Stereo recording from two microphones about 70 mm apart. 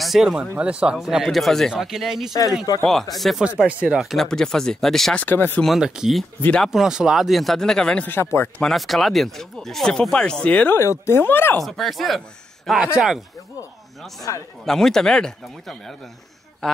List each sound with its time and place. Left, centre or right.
0.0 s speech: centre
3.6 s speech: centre
4.0 s speech: centre
5.1 s speech: left
5.8 s speech: centre
8.1 s speech: left
8.6 s speech: centre
10.7 s speech: left
11.6 s speech: centre
14.3 s speech: left
14.6 s speech: centre